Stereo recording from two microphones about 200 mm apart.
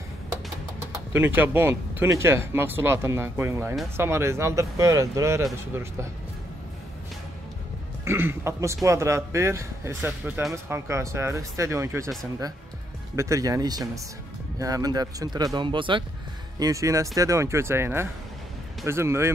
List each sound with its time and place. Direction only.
1.1 s speech: 10° right (ahead or behind)
8.0 s speech: 10° right (ahead or behind)
13.1 s speech: 15° right (ahead or behind)